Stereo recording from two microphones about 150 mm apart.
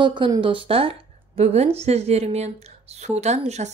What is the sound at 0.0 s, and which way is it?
A woman's voice, 30° right (ahead or behind).